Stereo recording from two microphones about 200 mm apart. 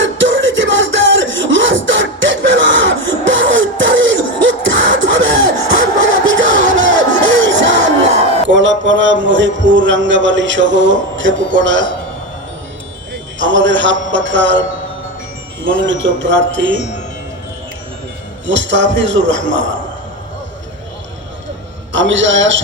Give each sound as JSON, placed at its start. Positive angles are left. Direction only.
{"t": 0.0, "sound": "a sound", "side_deg": -70}
{"t": 5.7, "sound": "crowd", "side_deg": -70}
{"t": 7.3, "sound": "music", "side_deg": -65}
{"t": 8.4, "sound": "a man's voice", "side_deg": -65}
{"t": 13.4, "sound": "speech", "side_deg": -65}
{"t": 15.6, "sound": "speech", "side_deg": -65}
{"t": 18.4, "sound": "speech", "side_deg": -65}
{"t": 21.9, "sound": "speech", "side_deg": -70}